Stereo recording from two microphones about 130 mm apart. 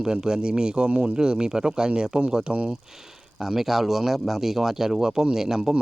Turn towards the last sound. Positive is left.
turn(degrees=-5)  # may be behind; listen again after turning